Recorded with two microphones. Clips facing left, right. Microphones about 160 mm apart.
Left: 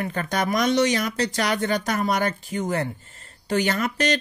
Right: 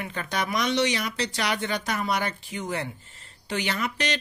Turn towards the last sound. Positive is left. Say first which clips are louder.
# left 5 dB
turn(degrees=45)  # may be behind; listen again after turning